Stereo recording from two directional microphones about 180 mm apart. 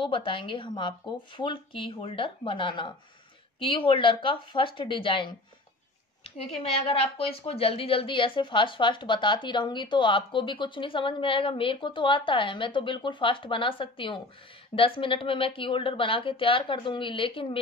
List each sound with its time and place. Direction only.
0.0 s speech: 30° left (ahead or behind)